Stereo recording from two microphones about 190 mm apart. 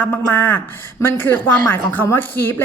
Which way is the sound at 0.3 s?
10° left (ahead or behind).